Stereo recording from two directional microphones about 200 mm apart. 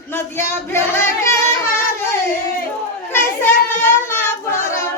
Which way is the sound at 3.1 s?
10° left (ahead or behind).